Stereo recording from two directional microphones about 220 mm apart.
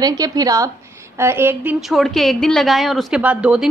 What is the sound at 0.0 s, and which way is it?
A woman's voice, 15° right (ahead or behind).